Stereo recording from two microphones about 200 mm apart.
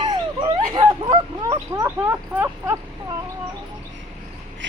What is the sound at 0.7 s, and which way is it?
Bow-wow, 25° right (ahead or behind).